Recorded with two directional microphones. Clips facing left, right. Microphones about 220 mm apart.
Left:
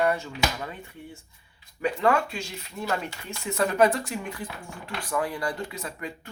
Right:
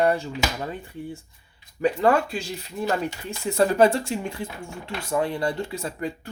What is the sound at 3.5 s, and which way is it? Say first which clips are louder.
Speech: right 4 dB; 30° right (ahead or behind).